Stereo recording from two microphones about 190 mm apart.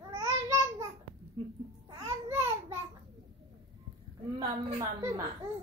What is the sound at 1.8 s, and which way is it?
Babbling, 15° right (ahead or behind).